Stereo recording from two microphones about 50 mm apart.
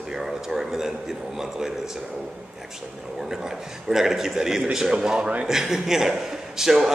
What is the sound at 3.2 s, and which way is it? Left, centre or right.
A man's voice, centre.